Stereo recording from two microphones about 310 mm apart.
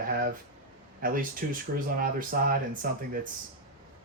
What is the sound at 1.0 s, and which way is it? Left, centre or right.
Speech, right.